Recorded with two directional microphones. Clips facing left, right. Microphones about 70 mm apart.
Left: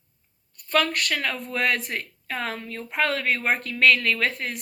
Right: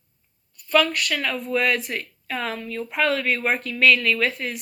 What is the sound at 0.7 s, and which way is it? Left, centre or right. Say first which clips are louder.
A woman's voice: right 3 dB; left.